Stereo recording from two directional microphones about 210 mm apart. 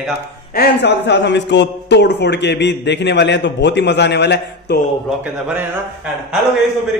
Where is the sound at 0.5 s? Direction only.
55° left (ahead or behind).